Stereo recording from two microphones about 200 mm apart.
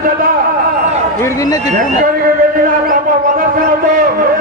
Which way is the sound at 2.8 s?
45° right (ahead or behind).